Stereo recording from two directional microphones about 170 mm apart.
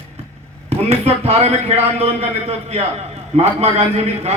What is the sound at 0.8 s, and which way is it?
A man's voice, 35° right (ahead or behind).